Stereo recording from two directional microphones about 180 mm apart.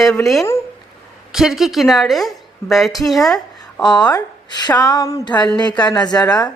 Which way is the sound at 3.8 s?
25° left (ahead or behind).